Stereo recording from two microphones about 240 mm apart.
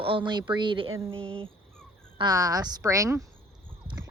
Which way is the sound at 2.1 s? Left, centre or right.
Centre.